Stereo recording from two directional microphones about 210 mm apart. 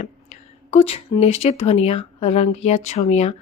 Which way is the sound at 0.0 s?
30° left (ahead or behind).